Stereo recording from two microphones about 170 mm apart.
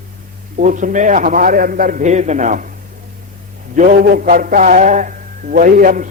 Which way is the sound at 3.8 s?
60° right (ahead or behind).